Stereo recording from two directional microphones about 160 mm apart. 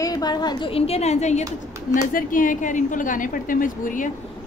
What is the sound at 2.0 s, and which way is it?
A woman's voice, 60° left (ahead or behind).